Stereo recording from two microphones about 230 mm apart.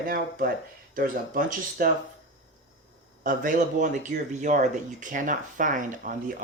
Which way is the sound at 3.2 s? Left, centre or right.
Right.